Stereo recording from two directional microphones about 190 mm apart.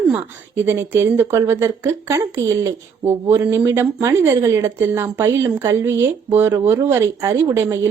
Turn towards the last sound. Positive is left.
turn(degrees=-15)  # may be behind; listen again after turning